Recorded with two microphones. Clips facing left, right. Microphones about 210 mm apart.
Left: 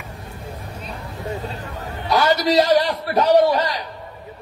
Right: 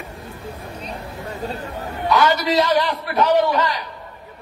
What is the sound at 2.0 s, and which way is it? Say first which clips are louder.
A man's voice: even; 35° left (ahead or behind).